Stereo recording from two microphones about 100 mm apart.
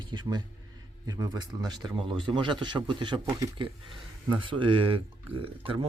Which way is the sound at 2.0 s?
55° right (ahead or behind).